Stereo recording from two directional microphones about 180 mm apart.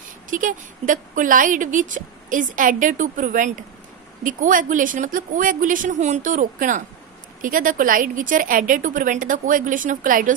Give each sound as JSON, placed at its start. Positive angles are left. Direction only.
{"t": 0.3, "sound": "a woman's voice", "side_deg": -45}